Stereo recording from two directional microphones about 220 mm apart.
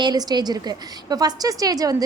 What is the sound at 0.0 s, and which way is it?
A woman's voice, 20° right (ahead or behind).